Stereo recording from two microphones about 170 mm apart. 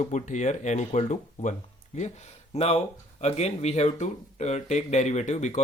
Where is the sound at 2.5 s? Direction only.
40° left (ahead or behind).